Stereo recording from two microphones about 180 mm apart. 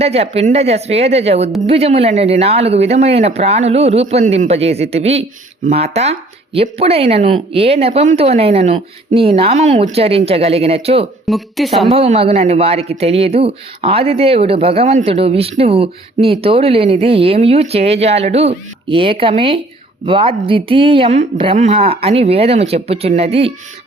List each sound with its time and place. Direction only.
0.0 s a man's voice: 35° right (ahead or behind)
11.3 s a woman's voice: centre (ahead or behind)
11.9 s a man's voice: 30° right (ahead or behind)